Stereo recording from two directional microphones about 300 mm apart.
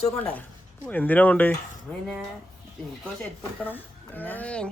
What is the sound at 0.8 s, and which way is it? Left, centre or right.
Speech, centre.